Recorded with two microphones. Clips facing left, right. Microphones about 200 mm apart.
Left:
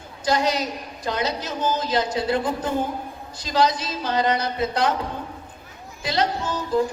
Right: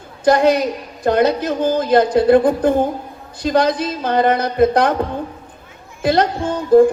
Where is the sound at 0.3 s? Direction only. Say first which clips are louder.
Right 9 dB; 55° right (ahead or behind).